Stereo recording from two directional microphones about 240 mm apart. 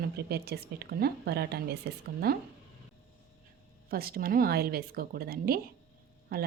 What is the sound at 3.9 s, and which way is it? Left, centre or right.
A woman's voice, right.